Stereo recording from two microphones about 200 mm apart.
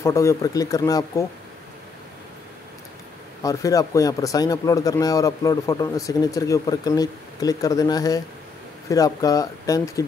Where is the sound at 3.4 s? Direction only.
15° left (ahead or behind).